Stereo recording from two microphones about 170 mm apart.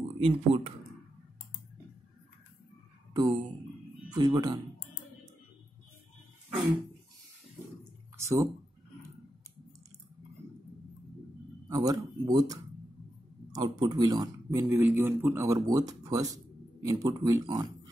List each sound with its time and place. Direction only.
0.2 s speech: 35° right (ahead or behind)
3.1 s a sound: 25° right (ahead or behind)
4.1 s speech: 25° right (ahead or behind)
8.2 s speech: 20° right (ahead or behind)
11.7 s speech: 20° right (ahead or behind)